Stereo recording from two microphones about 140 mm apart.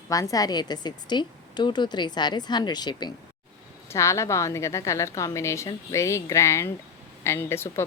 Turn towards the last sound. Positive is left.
turn(degrees=20)  # may be behind; listen again after turning